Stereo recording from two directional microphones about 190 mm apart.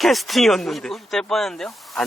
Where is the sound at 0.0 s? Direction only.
Centre (ahead or behind).